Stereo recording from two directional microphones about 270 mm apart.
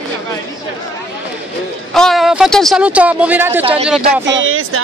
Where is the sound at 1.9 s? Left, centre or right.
Centre.